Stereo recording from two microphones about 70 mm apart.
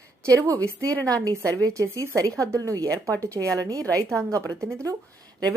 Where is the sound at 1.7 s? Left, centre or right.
Right.